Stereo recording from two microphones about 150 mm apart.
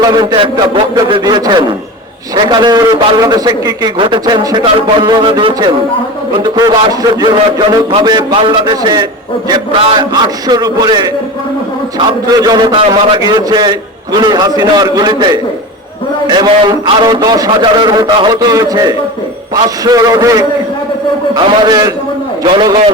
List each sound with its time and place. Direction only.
0.0 s a man's voice: 25° right (ahead or behind)